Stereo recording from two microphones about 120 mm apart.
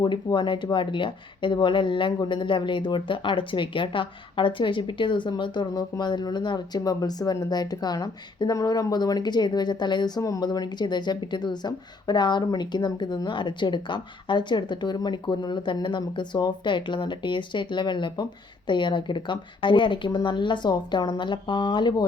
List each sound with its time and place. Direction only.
0.0 s speech: 40° left (ahead or behind)